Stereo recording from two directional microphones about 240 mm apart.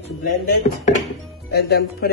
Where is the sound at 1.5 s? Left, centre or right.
Left.